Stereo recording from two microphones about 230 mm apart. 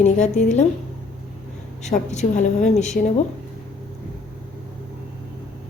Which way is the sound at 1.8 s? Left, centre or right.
Left.